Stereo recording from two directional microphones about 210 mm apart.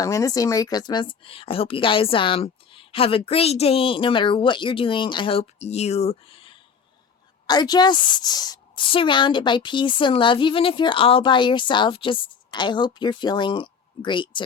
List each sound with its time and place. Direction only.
0.0 s a woman's voice: 15° left (ahead or behind)